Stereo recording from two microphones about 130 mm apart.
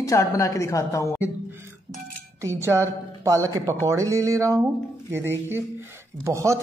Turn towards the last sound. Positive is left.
turn(degrees=-25)  # may be behind; listen again after turning